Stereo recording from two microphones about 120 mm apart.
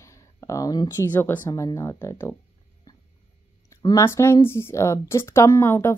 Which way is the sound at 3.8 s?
35° left (ahead or behind).